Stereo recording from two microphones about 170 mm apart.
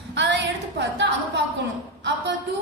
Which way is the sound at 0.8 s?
90° right.